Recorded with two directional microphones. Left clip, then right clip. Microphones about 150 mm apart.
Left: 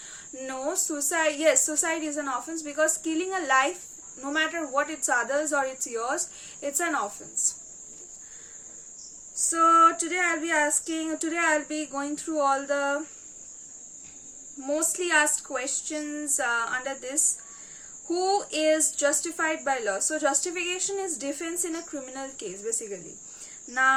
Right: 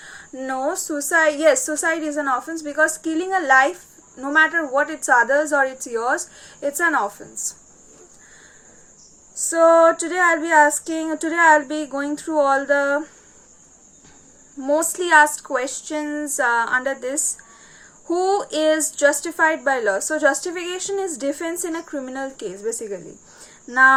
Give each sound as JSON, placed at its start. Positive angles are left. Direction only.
{"t": 0.4, "sound": "a woman's voice", "side_deg": 15}
{"t": 9.3, "sound": "a woman's voice", "side_deg": 5}
{"t": 14.6, "sound": "a woman's voice", "side_deg": 10}
{"t": 18.1, "sound": "a woman's voice", "side_deg": 5}